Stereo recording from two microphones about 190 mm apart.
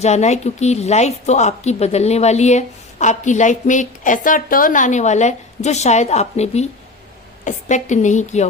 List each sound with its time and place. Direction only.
0.0 s a woman's voice: 35° left (ahead or behind)